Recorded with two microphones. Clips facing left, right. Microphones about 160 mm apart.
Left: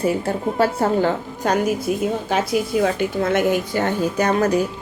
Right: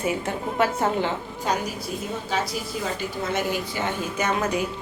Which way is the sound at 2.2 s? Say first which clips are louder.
Left 7 dB; 60° left (ahead or behind).